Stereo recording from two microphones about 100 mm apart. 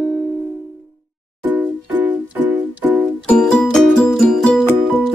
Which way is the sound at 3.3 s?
5° left (ahead or behind).